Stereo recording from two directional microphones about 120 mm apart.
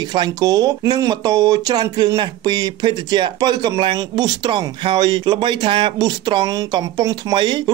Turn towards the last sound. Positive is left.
turn(degrees=-40)  # may be behind; listen again after turning